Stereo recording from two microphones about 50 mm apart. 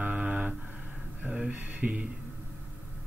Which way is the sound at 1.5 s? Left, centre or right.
Right.